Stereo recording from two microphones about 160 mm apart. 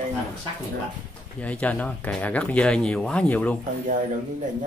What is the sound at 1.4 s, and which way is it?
Speech, 10° left (ahead or behind).